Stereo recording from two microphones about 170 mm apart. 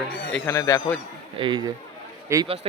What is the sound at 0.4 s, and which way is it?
Speech, 20° left (ahead or behind).